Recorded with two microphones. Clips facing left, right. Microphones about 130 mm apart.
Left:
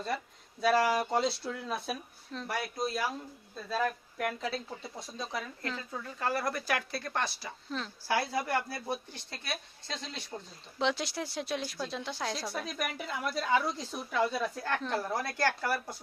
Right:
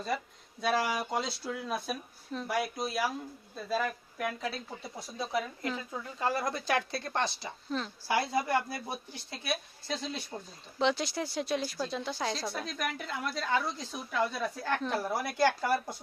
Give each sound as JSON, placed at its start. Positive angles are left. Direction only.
{"t": 0.6, "sound": "speech", "side_deg": 0}
{"t": 7.7, "sound": "speech", "side_deg": 0}
{"t": 8.0, "sound": "speech", "side_deg": -20}